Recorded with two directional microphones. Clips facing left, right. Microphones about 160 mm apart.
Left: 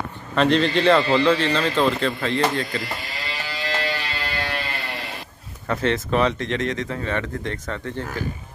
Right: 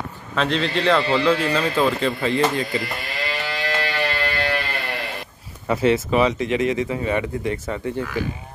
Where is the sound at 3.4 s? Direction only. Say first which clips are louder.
Left 1 dB; 60° right (ahead or behind).